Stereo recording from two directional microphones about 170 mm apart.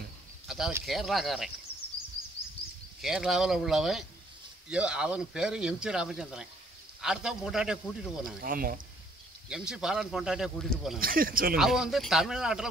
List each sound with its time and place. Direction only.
0.5 s a sound: 5° right (ahead or behind)
0.8 s speech: centre (ahead or behind)
3.0 s speech: centre (ahead or behind)
8.4 s speech: 60° right (ahead or behind)
9.5 s speech: 5° right (ahead or behind)
11.0 s speech: 60° right (ahead or behind)
11.5 s speech: 5° right (ahead or behind)